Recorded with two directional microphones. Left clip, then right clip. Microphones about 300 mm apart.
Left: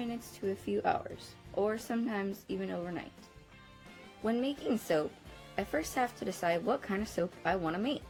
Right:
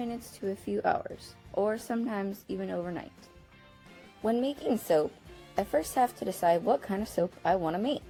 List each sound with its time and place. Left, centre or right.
0.0 s speech: right
4.2 s speech: centre